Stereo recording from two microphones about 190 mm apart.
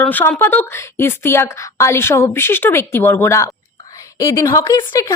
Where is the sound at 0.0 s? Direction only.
10° left (ahead or behind).